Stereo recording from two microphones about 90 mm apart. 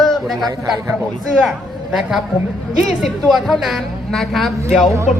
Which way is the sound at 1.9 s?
5° right (ahead or behind).